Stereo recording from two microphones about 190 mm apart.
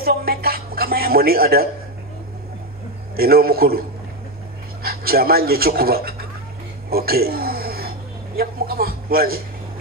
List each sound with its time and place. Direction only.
0.0 s a woman's voice: 55° right (ahead or behind)
3.2 s a man's voice: 55° right (ahead or behind)
4.8 s speech: 55° right (ahead or behind)
6.9 s a sound: 55° right (ahead or behind)
8.4 s a man's voice: 55° right (ahead or behind)